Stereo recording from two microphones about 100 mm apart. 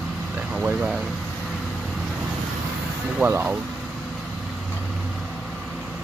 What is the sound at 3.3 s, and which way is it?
Speech, 20° right (ahead or behind).